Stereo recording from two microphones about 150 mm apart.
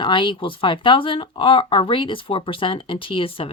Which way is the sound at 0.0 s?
35° left (ahead or behind).